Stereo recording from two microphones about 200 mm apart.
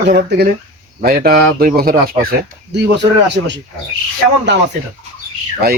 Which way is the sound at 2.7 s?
60° right (ahead or behind).